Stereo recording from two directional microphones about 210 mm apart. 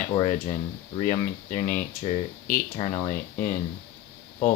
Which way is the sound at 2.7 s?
25° left (ahead or behind).